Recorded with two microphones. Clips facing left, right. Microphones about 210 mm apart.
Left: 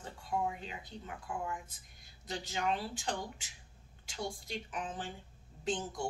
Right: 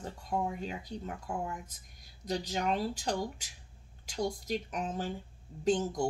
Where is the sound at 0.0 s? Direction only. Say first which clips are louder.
Right 2 dB; 45° right (ahead or behind).